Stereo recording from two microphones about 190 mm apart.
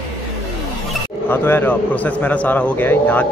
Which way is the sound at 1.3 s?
10° left (ahead or behind).